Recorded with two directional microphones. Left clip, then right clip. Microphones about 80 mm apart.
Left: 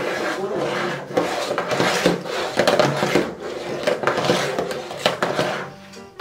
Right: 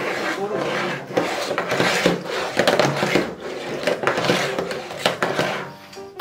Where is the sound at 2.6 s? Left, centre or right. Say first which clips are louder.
Left 1 dB; centre.